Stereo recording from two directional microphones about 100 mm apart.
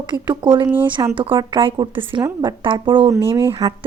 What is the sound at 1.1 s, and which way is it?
A woman's voice, 55° right (ahead or behind).